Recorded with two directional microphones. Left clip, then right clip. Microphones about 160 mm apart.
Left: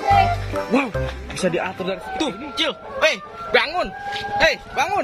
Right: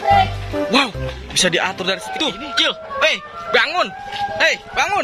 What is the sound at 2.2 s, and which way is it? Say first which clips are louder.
Speech: right 4 dB; 5° left (ahead or behind).